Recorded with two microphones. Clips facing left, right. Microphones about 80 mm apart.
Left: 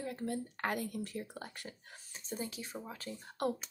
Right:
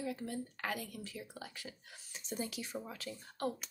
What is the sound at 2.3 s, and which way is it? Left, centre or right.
Speech, left.